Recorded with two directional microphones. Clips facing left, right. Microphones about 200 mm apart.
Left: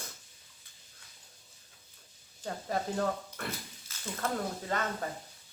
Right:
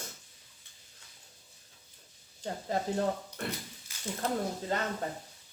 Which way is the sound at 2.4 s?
25° right (ahead or behind).